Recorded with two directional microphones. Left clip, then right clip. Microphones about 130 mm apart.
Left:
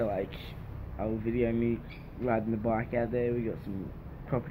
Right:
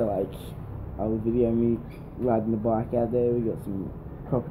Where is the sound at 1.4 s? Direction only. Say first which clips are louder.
Right 5 dB; 40° left (ahead or behind).